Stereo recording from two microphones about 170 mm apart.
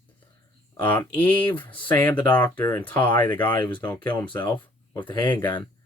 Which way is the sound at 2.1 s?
25° left (ahead or behind).